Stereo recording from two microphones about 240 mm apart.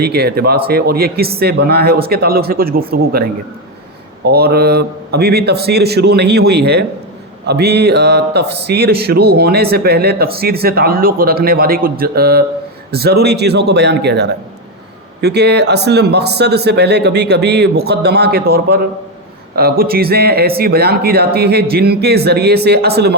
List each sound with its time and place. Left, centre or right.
0.0 s a man's voice: right
4.3 s a man's voice: right